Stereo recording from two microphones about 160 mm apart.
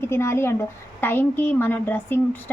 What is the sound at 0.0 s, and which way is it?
A woman's voice, 15° left (ahead or behind).